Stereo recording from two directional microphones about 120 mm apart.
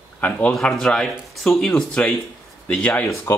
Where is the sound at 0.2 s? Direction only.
10° left (ahead or behind).